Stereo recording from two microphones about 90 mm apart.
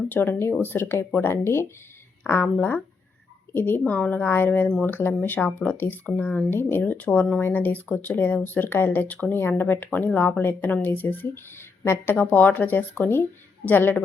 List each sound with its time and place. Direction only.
0.1 s speech: 25° left (ahead or behind)